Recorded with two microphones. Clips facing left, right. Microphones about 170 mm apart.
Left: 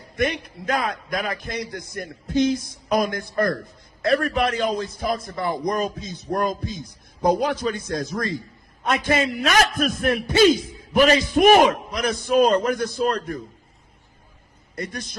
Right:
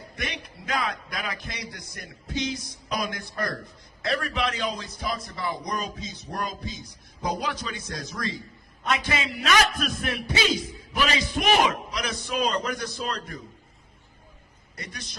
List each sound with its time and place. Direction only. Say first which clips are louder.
0.2 s a man's voice: left 12 dB; 50° left (ahead or behind)
14.8 s a man's voice: left 10 dB; 50° left (ahead or behind)